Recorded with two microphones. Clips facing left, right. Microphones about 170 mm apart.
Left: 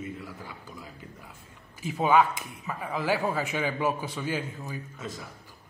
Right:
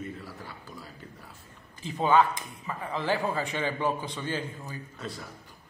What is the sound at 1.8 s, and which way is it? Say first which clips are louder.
Speech: left 1 dB; 10° left (ahead or behind).